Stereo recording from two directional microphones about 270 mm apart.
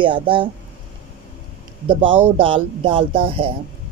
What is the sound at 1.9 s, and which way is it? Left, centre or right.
Speech, centre.